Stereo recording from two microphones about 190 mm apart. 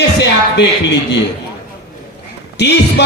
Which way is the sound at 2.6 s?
65° left (ahead or behind).